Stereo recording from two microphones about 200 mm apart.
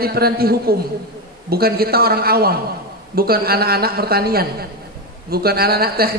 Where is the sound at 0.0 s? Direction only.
50° right (ahead or behind).